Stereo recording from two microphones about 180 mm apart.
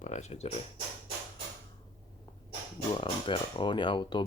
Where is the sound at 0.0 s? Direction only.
40° left (ahead or behind).